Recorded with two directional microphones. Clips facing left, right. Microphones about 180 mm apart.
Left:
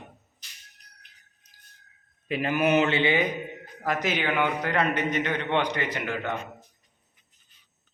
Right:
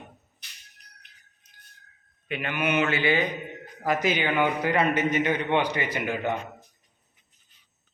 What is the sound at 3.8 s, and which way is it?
A man's voice, centre (ahead or behind).